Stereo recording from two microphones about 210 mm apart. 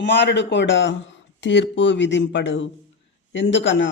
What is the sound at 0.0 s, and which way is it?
Speech, 55° left (ahead or behind).